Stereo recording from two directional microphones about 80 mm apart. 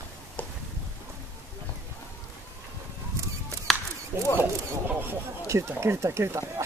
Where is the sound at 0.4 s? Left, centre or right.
Left.